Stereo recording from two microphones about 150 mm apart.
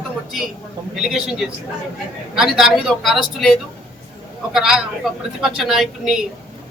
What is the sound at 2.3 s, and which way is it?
Speech, centre (ahead or behind).